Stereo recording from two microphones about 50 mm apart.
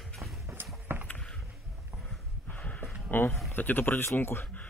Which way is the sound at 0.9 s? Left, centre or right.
Right.